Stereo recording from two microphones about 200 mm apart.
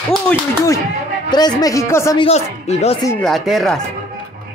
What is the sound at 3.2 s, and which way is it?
Speech, centre (ahead or behind).